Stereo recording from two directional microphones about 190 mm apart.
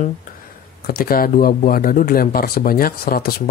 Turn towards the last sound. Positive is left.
turn(degrees=55)  # may be behind; listen again after turning